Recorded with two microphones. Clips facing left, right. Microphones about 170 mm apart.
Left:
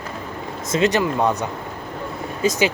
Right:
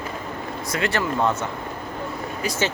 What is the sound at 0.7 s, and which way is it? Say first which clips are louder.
Speech: left 5 dB; 20° left (ahead or behind).